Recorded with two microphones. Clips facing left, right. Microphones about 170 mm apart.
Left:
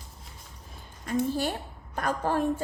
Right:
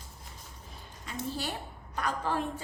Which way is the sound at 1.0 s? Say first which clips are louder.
Left 9 dB; 50° left (ahead or behind).